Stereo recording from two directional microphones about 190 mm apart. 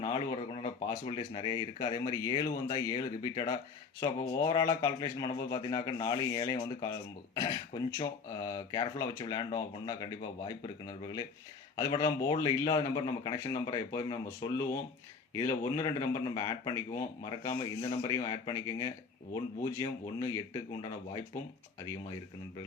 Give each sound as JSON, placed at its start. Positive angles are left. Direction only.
{"t": 0.0, "sound": "speech", "side_deg": 25}